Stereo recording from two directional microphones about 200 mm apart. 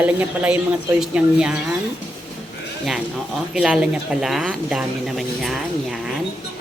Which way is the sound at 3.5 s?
5° right (ahead or behind).